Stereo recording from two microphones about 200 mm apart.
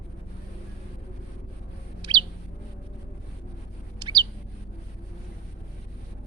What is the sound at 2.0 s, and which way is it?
Bird, 25° right (ahead or behind).